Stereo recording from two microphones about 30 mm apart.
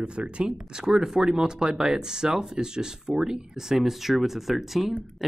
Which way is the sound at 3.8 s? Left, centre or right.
Centre.